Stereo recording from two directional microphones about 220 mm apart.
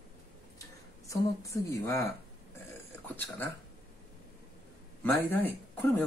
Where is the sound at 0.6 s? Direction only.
15° left (ahead or behind).